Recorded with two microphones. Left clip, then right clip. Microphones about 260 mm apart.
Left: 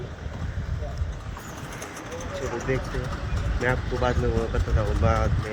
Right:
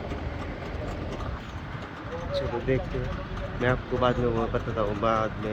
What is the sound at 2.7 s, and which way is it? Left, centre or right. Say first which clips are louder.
Speech: even; centre.